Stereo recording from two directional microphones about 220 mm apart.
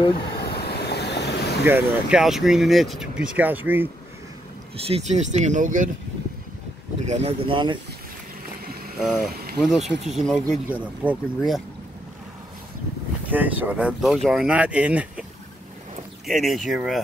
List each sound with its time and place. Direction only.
0.4 s vehicle: 45° left (ahead or behind)
1.6 s speech: 5° right (ahead or behind)
4.8 s speech: 30° right (ahead or behind)
7.1 s speech: 30° right (ahead or behind)
9.0 s speech: centre (ahead or behind)
13.3 s speech: 10° right (ahead or behind)
16.3 s speech: centre (ahead or behind)